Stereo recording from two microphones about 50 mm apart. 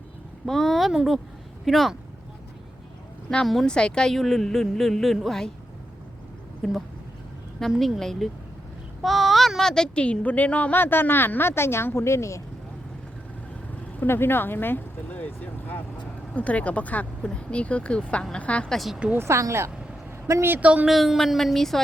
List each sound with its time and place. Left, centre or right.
0.4 s a woman's voice: centre
3.4 s a woman's voice: centre
3.7 s a woman's voice: centre
6.6 s a woman's voice: centre
9.0 s a sound: centre
9.6 s speech: centre; by 10.8 s left
10.8 s a woman's voice: left
14.1 s a woman's voice: left
15.1 s speech: left
19.1 s speech: right
20.6 s speech: right
20.8 s a woman's voice: centre